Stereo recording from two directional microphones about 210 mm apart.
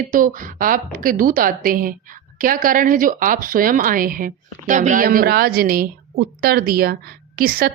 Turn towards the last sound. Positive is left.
turn(degrees=-45)  # may be behind; listen again after turning